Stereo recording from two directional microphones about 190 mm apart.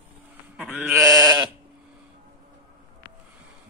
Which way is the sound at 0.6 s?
10° right (ahead or behind).